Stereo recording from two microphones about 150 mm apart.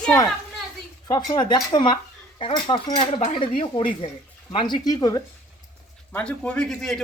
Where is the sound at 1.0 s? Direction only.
30° left (ahead or behind).